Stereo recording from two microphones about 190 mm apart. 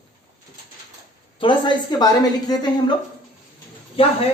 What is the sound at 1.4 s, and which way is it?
A woman's voice, 25° left (ahead or behind).